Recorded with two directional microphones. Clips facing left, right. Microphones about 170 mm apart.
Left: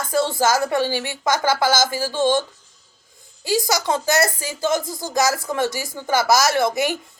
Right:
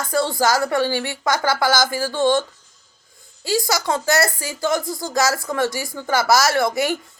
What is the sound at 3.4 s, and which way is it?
Speech, 20° left (ahead or behind).